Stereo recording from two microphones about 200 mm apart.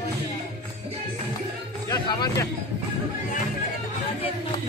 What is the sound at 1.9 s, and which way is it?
Speech, 20° left (ahead or behind).